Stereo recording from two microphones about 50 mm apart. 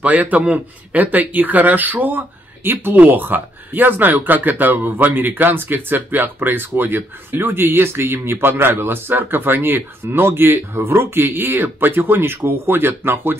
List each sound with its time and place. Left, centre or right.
0.0 s speech: right